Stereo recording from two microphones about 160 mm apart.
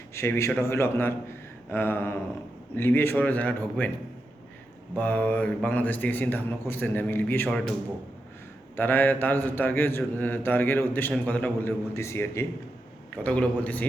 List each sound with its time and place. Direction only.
0.1 s a man's voice: 15° left (ahead or behind)
4.9 s a man's voice: 10° left (ahead or behind)
8.7 s a man's voice: 10° left (ahead or behind)